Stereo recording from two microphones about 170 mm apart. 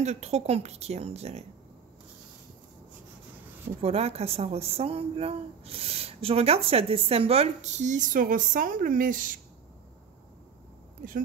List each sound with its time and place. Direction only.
0.0 s a woman's voice: 40° right (ahead or behind)
3.8 s a woman's voice: 35° right (ahead or behind); by 9.4 s 50° right (ahead or behind)